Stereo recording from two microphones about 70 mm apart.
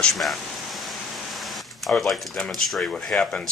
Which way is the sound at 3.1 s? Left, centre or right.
Centre.